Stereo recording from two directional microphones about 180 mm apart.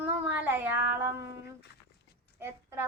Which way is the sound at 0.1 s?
10° right (ahead or behind).